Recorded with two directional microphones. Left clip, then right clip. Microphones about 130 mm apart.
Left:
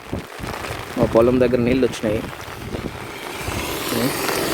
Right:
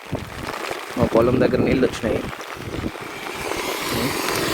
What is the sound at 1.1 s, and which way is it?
Speech, 75° left (ahead or behind).